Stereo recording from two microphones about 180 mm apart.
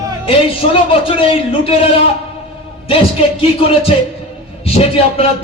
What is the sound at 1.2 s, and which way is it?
Speech, 30° left (ahead or behind).